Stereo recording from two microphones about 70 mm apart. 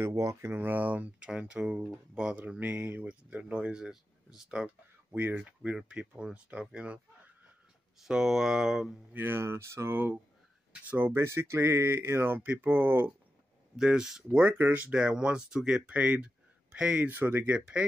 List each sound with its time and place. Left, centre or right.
0.1 s speech: right
0.5 s speech: right
5.1 s speech: right
5.8 s speech: centre
8.0 s speech: centre
9.1 s speech: right
10.7 s speech: right
11.1 s speech: right
13.7 s speech: centre
14.3 s speech: right
17.5 s speech: centre